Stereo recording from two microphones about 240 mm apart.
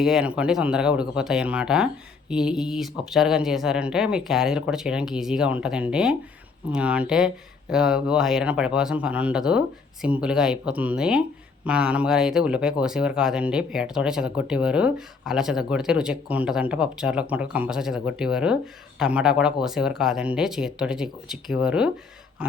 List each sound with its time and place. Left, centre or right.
0.0 s speech: centre